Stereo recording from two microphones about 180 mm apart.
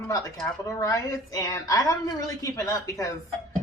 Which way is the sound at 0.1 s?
20° left (ahead or behind).